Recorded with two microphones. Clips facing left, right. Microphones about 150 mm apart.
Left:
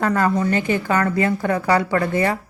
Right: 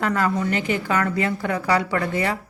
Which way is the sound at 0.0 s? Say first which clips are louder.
Left 3 dB; 35° left (ahead or behind).